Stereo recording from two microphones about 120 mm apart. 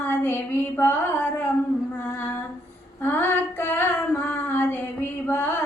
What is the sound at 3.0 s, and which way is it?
Female singing, 15° left (ahead or behind).